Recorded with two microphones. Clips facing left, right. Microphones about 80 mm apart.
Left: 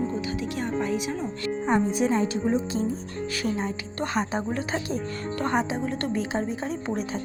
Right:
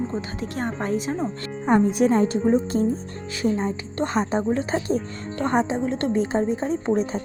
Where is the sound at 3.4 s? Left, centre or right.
Right.